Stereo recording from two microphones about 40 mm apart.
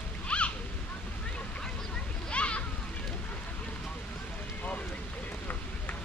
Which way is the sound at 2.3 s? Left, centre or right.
Left.